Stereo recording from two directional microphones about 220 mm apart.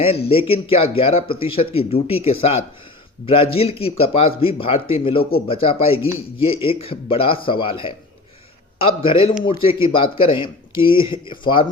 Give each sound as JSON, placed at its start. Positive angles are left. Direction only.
{"t": 0.0, "sound": "speech", "side_deg": 25}